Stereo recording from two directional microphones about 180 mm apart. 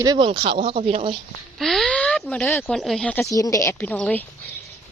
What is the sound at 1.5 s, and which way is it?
Speech, centre (ahead or behind).